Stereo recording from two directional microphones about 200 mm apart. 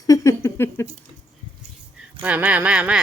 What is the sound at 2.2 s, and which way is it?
Speech, 5° right (ahead or behind).